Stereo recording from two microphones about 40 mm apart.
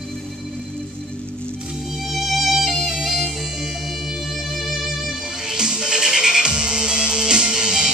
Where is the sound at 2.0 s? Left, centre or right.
Centre.